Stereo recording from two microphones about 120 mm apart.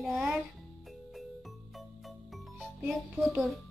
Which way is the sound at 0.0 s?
Centre (ahead or behind).